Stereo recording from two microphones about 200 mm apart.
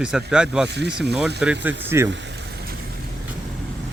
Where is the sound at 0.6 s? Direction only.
60° right (ahead or behind).